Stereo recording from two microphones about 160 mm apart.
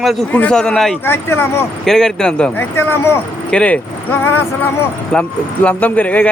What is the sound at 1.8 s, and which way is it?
Speech, centre (ahead or behind).